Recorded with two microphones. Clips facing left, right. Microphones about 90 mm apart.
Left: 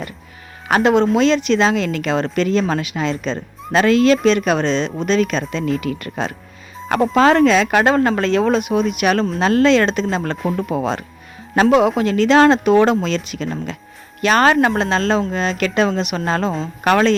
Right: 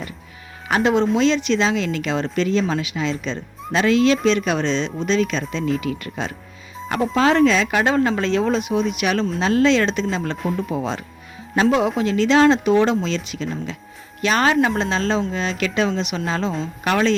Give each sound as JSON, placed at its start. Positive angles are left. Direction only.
{"t": 0.7, "sound": "speech", "side_deg": 60}